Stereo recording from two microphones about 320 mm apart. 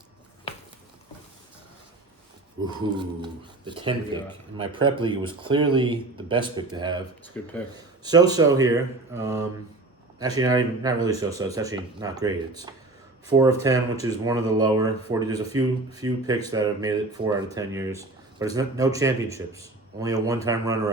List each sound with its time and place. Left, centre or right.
3.2 s speech: centre
7.3 s speech: centre
7.8 s speech: centre